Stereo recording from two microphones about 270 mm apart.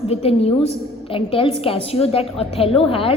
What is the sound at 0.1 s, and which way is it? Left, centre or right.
A woman's voice, left.